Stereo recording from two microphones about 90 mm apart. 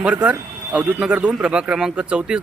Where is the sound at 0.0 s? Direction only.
15° right (ahead or behind).